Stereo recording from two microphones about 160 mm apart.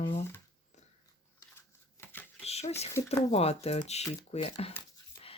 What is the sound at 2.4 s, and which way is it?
Speech, 40° left (ahead or behind).